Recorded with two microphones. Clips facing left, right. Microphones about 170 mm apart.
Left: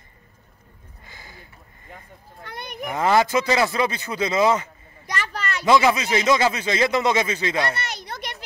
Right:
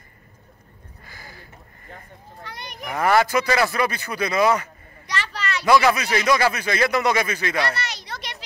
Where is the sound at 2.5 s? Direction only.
55° left (ahead or behind).